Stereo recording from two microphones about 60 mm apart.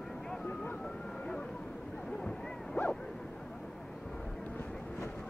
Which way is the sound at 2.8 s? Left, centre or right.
Left.